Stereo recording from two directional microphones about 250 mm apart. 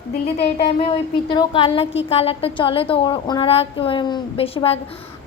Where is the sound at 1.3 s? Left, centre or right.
Left.